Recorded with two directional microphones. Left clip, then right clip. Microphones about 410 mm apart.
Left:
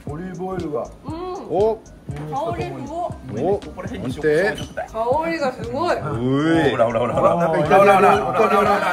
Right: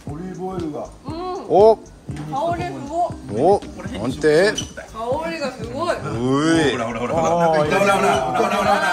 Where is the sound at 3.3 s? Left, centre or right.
Centre.